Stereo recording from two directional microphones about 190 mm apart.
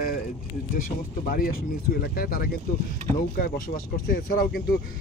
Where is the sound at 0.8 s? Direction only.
50° left (ahead or behind).